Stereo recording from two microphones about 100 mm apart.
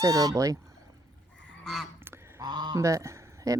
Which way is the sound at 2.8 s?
30° right (ahead or behind).